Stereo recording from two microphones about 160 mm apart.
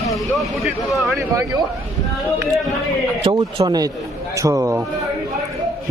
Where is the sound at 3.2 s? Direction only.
30° right (ahead or behind).